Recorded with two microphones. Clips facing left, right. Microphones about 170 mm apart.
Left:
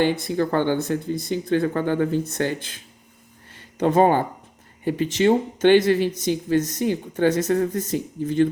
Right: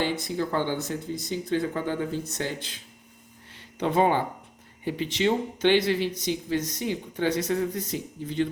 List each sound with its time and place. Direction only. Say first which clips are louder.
0.0 s speech: left 6 dB; 60° left (ahead or behind)
3.5 s a sound: left 6 dB; 45° left (ahead or behind)
4.9 s speech: left 6 dB; 45° left (ahead or behind)